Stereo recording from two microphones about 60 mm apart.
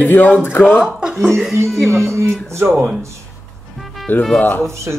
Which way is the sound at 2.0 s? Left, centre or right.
Right.